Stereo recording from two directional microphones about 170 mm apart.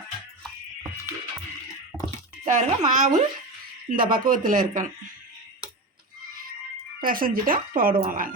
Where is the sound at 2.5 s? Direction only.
45° right (ahead or behind).